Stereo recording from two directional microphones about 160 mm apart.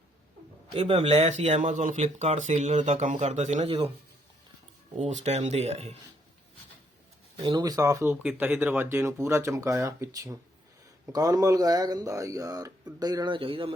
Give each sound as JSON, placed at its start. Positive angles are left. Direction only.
{"t": 0.7, "sound": "speech", "side_deg": -40}
{"t": 4.9, "sound": "speech", "side_deg": -45}
{"t": 7.3, "sound": "speech", "side_deg": -30}
{"t": 8.1, "sound": "speech", "side_deg": -5}